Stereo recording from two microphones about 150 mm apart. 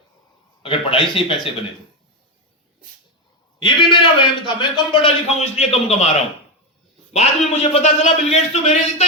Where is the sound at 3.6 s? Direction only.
35° left (ahead or behind).